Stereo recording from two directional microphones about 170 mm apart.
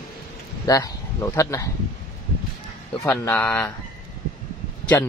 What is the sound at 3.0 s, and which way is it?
Speech, 15° left (ahead or behind).